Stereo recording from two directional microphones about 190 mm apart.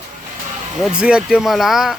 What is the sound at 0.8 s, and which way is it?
Speech, 5° right (ahead or behind).